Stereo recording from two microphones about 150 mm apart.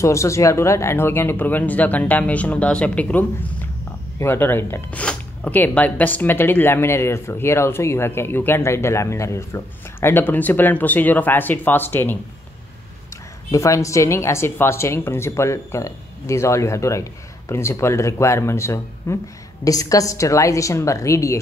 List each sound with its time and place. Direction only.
0.0 s speech: 20° left (ahead or behind)
13.5 s speech: 20° left (ahead or behind)